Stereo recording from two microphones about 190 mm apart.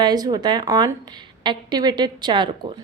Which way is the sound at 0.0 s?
20° right (ahead or behind).